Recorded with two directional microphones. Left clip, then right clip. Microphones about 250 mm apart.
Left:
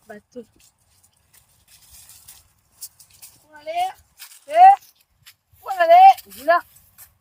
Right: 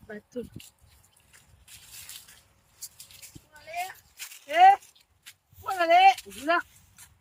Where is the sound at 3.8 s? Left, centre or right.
Left.